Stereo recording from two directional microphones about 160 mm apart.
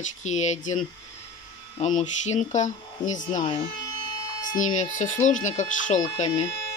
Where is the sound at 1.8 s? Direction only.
45° left (ahead or behind).